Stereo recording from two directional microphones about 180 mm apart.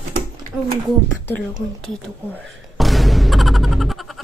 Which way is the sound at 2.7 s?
Centre (ahead or behind).